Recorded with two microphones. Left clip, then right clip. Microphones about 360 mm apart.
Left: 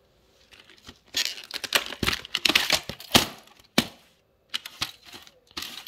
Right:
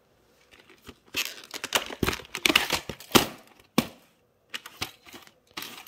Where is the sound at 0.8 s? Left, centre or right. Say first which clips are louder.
Left 3 dB; centre.